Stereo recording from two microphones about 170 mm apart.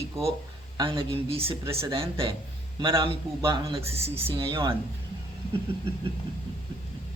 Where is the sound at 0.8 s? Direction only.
30° right (ahead or behind).